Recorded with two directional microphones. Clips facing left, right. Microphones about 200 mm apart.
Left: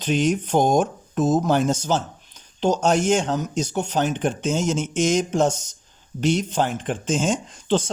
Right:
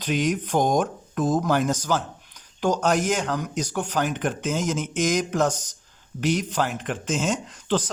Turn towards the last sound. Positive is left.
turn(degrees=30)  # may be behind; listen again after turning